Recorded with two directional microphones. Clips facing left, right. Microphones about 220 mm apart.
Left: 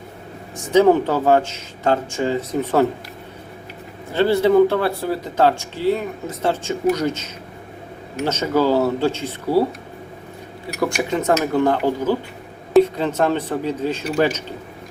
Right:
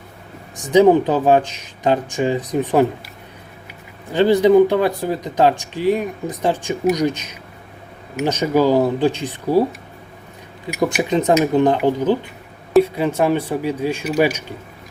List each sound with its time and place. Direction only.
0.5 s speech: 15° right (ahead or behind)
4.1 s speech: 15° right (ahead or behind)
10.7 s speech: 20° right (ahead or behind)